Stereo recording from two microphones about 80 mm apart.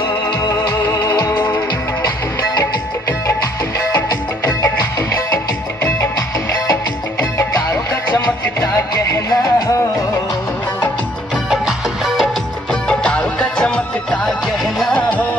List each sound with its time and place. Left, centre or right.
0.5 s music: left
1.3 s music: left
2.6 s music: left
6.7 s music: left
8.7 s music: left
11.5 s music: centre
12.8 s music: centre